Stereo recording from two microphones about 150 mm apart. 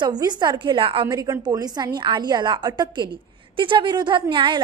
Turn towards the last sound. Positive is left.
turn(degrees=-30)  # may be behind; listen again after turning